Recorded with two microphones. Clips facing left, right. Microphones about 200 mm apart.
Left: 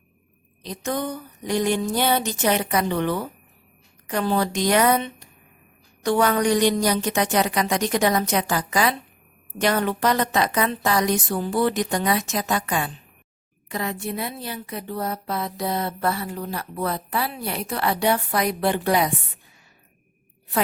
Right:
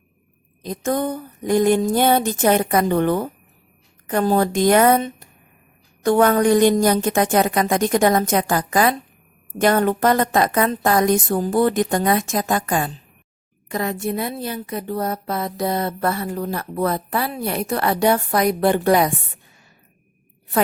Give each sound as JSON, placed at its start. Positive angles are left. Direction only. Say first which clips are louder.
{"t": 0.6, "sound": "a woman's voice", "louder": "right 5 dB", "side_deg": -50}